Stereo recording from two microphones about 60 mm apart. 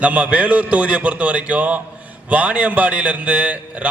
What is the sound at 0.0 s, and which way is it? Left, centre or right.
A man's voice, right.